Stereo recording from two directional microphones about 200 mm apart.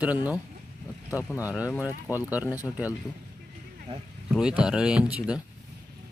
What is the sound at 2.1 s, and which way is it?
Speech, 15° left (ahead or behind).